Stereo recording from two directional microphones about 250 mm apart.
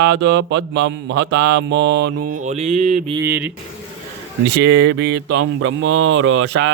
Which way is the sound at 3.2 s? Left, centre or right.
Centre.